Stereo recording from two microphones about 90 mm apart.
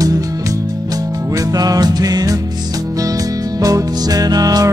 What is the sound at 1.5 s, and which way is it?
Music, 45° right (ahead or behind).